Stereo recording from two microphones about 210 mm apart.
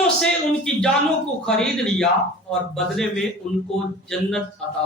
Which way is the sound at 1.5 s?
5° left (ahead or behind).